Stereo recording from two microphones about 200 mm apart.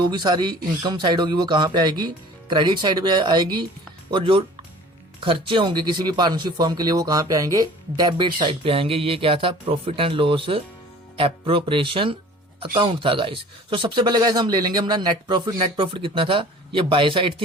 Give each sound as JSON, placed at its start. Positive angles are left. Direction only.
{"t": 0.0, "sound": "speech", "side_deg": -20}